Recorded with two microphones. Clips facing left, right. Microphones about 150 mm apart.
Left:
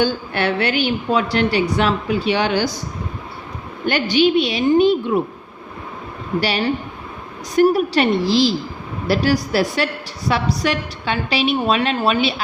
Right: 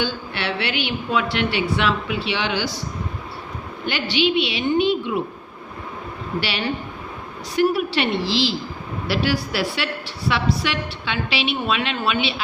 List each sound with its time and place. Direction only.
0.0 s a woman's voice: 45° left (ahead or behind)
3.8 s a woman's voice: 45° left (ahead or behind)
6.4 s a woman's voice: 45° left (ahead or behind)